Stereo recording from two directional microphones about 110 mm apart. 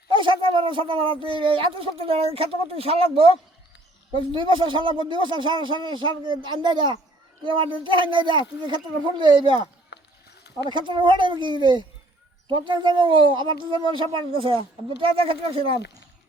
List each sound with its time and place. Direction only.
0.1 s speech: 50° right (ahead or behind)
4.1 s speech: 45° right (ahead or behind)
10.7 s speech: 45° right (ahead or behind)